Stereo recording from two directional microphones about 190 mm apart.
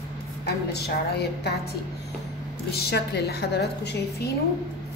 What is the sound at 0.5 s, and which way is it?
Speech, 60° left (ahead or behind).